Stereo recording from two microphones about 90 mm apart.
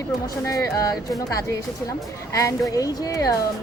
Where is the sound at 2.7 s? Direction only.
40° left (ahead or behind).